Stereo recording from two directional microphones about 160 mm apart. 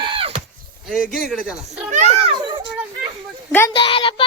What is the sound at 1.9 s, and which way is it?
Speech, 45° right (ahead or behind).